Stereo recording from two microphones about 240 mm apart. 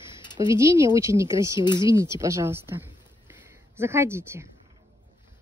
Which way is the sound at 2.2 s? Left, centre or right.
Centre.